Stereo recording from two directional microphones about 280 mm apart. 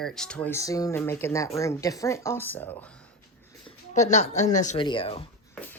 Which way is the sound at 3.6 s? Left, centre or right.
Left.